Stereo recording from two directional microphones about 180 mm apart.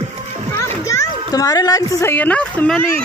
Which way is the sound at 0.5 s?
15° left (ahead or behind).